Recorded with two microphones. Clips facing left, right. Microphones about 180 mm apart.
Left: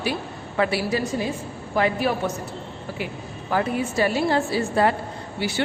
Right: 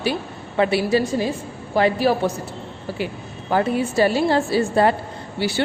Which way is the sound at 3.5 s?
30° right (ahead or behind).